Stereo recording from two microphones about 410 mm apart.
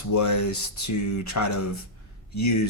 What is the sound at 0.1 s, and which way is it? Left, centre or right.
Speech, left.